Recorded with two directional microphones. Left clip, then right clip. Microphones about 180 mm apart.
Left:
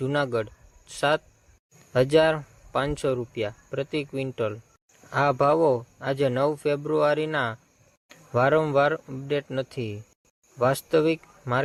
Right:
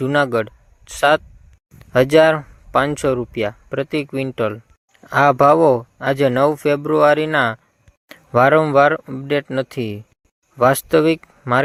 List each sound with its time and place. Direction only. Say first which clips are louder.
0.0 s a man's voice: right 9 dB; 40° right (ahead or behind)